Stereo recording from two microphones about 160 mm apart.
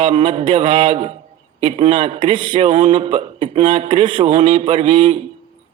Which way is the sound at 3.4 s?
50° right (ahead or behind).